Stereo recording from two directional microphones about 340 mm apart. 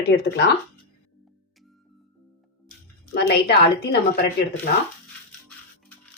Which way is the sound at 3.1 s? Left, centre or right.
Left.